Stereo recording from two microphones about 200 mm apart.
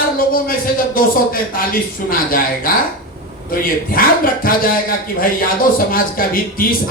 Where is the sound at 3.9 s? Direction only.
45° left (ahead or behind).